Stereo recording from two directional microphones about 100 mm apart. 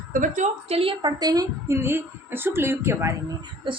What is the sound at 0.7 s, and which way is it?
Speech, 70° right (ahead or behind).